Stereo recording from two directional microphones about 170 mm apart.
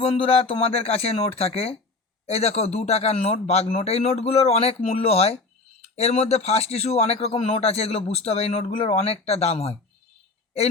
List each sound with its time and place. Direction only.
0.0 s a man's voice: 30° left (ahead or behind)